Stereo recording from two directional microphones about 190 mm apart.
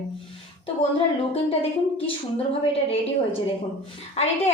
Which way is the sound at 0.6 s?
30° left (ahead or behind).